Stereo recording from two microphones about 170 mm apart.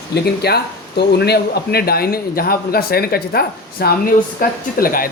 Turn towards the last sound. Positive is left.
turn(degrees=60)  # may be behind; listen again after turning